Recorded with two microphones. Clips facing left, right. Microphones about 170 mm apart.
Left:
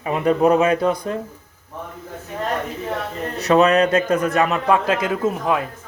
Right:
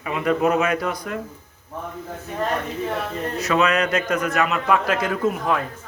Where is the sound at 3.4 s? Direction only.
35° left (ahead or behind); by 5.6 s 20° left (ahead or behind).